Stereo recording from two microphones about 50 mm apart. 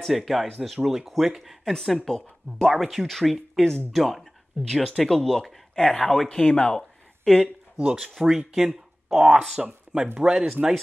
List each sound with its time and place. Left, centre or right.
0.0 s speech: centre
1.7 s speech: centre
6.3 s speech: centre
6.8 s a sound: centre
8.0 s speech: centre
9.6 s speech: centre